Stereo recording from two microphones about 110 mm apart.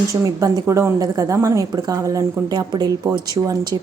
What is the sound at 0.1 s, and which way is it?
A woman's voice, 30° right (ahead or behind).